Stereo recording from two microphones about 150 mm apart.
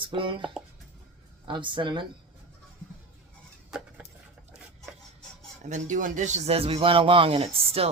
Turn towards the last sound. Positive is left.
turn(degrees=-40)  # may be behind; listen again after turning